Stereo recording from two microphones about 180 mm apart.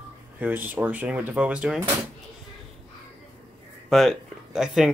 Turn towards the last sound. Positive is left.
turn(degrees=0)  # may be behind; listen again after turning